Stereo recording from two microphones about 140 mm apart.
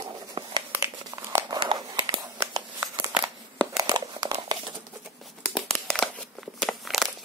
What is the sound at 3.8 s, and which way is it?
Crumpling, 30° right (ahead or behind).